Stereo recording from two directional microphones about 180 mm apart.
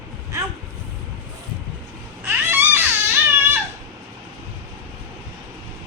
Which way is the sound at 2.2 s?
10° right (ahead or behind).